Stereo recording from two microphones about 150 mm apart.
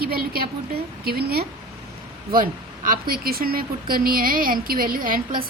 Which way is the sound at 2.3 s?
75° right (ahead or behind).